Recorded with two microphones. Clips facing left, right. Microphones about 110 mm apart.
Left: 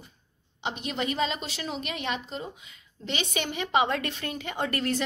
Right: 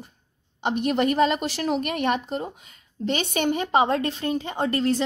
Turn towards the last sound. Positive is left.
turn(degrees=-25)  # may be behind; listen again after turning